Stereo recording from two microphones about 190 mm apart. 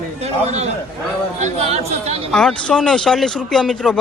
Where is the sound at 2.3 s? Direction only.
5° left (ahead or behind).